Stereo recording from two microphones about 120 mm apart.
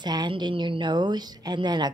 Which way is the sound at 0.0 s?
35° right (ahead or behind).